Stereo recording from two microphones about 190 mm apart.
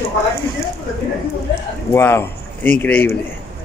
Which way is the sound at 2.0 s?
10° left (ahead or behind).